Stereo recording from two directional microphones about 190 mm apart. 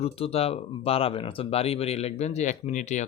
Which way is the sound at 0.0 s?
30° left (ahead or behind).